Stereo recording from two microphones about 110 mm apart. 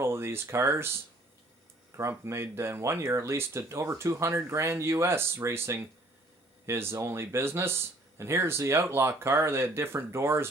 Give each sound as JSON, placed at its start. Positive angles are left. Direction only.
{"t": 0.0, "sound": "speech", "side_deg": -25}
{"t": 2.0, "sound": "speech", "side_deg": -25}